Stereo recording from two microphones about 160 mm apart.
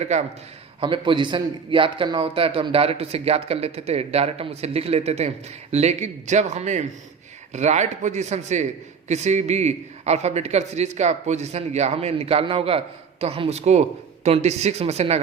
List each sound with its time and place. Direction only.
0.0 s a man's voice: 45° right (ahead or behind)
0.8 s a man's voice: 30° right (ahead or behind)